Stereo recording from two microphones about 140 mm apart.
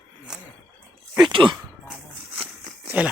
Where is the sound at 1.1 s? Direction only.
35° right (ahead or behind).